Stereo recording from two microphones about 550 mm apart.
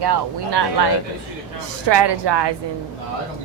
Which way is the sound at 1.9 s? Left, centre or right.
Right.